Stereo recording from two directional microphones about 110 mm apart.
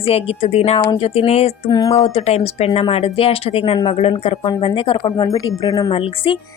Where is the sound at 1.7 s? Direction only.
35° left (ahead or behind).